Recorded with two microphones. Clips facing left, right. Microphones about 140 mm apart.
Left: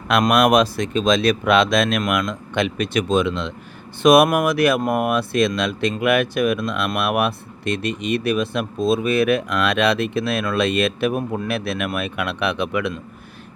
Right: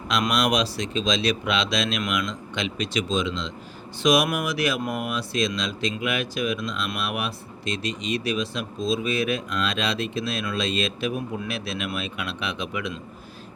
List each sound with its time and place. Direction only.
0.1 s speech: 55° left (ahead or behind)